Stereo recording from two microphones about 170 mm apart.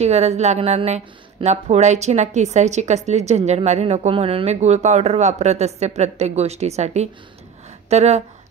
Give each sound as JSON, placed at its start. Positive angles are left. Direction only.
{"t": 0.0, "sound": "a woman's voice", "side_deg": -40}